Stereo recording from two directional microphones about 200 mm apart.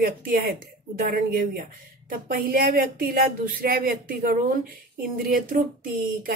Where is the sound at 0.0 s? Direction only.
45° right (ahead or behind).